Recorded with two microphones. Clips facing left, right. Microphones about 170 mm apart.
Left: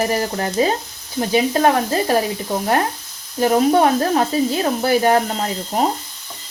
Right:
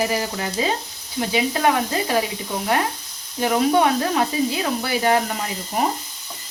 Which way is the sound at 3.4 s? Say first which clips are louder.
Left 4 dB; 40° left (ahead or behind).